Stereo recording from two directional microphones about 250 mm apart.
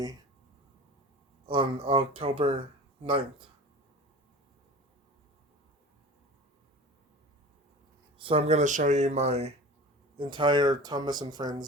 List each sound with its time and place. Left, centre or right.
1.5 s speech: centre
8.2 s speech: right